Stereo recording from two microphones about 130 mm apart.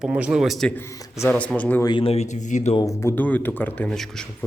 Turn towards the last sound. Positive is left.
turn(degrees=5)  # may be behind; listen again after turning